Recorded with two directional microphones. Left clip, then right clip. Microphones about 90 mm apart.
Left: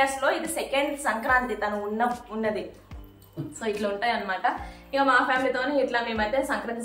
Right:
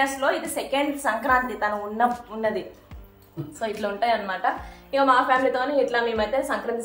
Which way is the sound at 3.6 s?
35° right (ahead or behind).